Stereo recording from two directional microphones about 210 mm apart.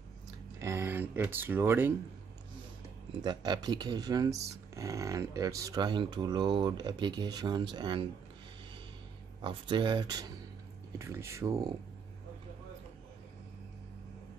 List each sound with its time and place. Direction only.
0.6 s a sound: 10° right (ahead or behind)
3.2 s speech: 20° right (ahead or behind)
9.4 s speech: 20° right (ahead or behind)